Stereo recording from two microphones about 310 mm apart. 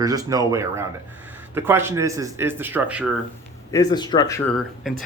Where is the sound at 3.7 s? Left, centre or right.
Centre.